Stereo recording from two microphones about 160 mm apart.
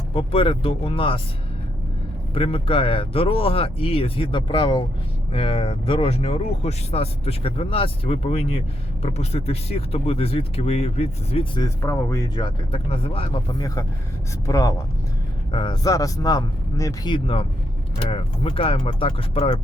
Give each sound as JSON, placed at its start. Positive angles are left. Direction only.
{"t": 0.1, "sound": "speech", "side_deg": 35}
{"t": 2.3, "sound": "speech", "side_deg": 35}
{"t": 11.6, "sound": "a man's voice", "side_deg": 15}
{"t": 13.6, "sound": "a man's voice", "side_deg": 20}